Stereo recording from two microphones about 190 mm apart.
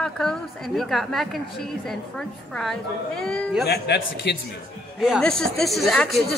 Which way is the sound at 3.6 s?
60° left (ahead or behind).